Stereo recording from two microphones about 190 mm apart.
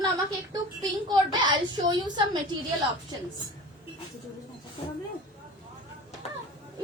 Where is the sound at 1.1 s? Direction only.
25° right (ahead or behind).